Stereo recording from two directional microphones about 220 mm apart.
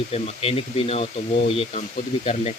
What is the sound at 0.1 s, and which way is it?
Speech, 25° left (ahead or behind).